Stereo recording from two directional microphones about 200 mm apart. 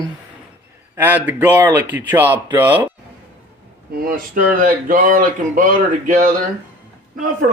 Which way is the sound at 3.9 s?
45° right (ahead or behind).